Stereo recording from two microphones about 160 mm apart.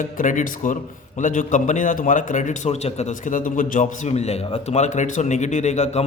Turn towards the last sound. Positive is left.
turn(degrees=45)  # may be behind; listen again after turning